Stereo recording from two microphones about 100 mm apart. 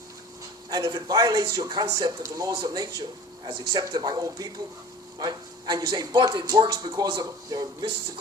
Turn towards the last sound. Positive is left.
turn(degrees=-40)  # may be behind; listen again after turning